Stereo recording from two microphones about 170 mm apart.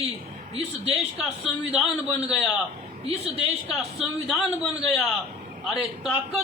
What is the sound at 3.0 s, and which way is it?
Speech, 40° right (ahead or behind).